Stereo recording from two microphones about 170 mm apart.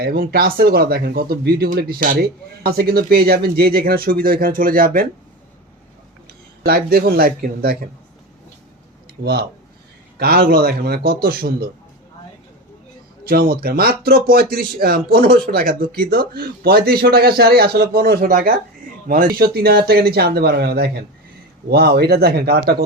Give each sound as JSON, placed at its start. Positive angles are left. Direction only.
{"t": 0.0, "sound": "speech", "side_deg": -65}
{"t": 6.7, "sound": "speech", "side_deg": -60}
{"t": 9.2, "sound": "speech", "side_deg": -70}
{"t": 13.2, "sound": "speech", "side_deg": -60}